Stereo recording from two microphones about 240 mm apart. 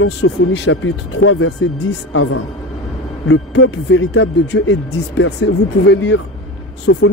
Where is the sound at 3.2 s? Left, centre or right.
Left.